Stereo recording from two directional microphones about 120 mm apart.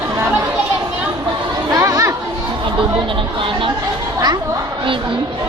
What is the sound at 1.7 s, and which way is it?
Chatter, 30° right (ahead or behind).